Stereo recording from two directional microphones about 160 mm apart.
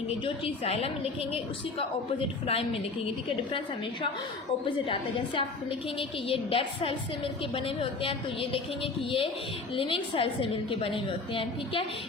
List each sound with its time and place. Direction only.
0.4 s a woman's voice: 40° left (ahead or behind)
2.5 s a woman's voice: 35° left (ahead or behind)
4.6 s a woman's voice: 30° left (ahead or behind)